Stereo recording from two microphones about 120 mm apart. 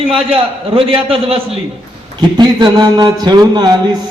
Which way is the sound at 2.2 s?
40° right (ahead or behind).